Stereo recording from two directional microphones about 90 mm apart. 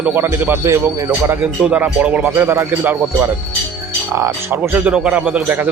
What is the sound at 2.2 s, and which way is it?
Speech, 25° right (ahead or behind).